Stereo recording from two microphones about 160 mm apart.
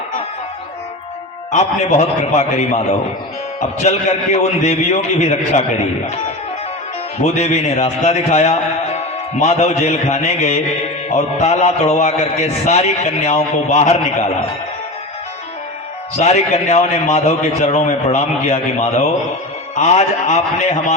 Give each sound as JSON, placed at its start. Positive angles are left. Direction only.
{"t": 1.5, "sound": "a man's voice", "side_deg": 45}
{"t": 3.8, "sound": "a man's voice", "side_deg": 45}
{"t": 7.2, "sound": "a man's voice", "side_deg": 45}
{"t": 16.1, "sound": "a man's voice", "side_deg": 45}